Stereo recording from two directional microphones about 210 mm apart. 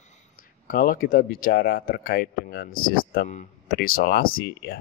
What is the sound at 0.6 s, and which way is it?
Speech, 40° left (ahead or behind).